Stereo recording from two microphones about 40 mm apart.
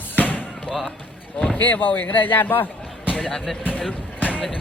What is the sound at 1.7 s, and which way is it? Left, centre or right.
Speech, left.